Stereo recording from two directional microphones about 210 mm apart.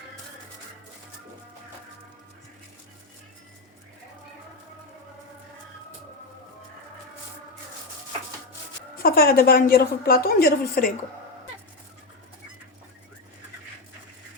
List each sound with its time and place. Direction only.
9.0 s a woman's voice: 45° left (ahead or behind)